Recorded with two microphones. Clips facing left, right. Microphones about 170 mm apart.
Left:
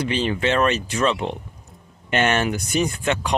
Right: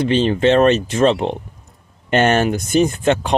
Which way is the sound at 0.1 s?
35° right (ahead or behind).